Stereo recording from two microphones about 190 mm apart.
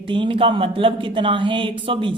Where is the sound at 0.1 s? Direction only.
25° right (ahead or behind).